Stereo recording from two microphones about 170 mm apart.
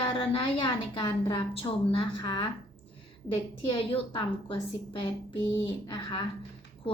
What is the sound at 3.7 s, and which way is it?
A woman's voice, 30° left (ahead or behind).